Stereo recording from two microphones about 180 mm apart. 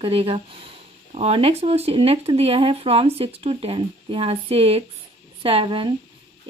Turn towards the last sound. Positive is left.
turn(degrees=-30)  # may be behind; listen again after turning